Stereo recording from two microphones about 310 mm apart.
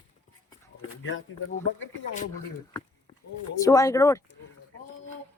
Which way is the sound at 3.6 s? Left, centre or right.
Centre.